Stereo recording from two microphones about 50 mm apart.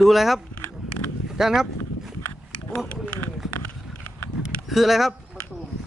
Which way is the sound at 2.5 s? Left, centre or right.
Left.